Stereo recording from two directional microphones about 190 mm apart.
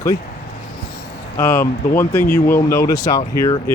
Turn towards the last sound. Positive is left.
turn(degrees=20)  # may be behind; listen again after turning